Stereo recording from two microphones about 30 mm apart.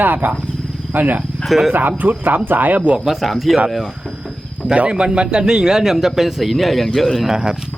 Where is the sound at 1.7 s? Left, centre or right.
Right.